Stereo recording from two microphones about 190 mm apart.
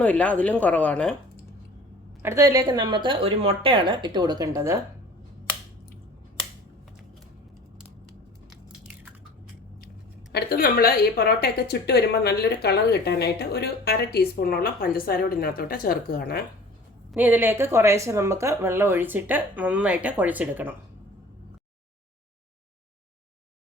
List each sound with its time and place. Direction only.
0.0 s speech: 10° left (ahead or behind)
2.2 s a woman's voice: 15° right (ahead or behind)
10.3 s a woman's voice: 55° left (ahead or behind)
17.2 s speech: 10° right (ahead or behind)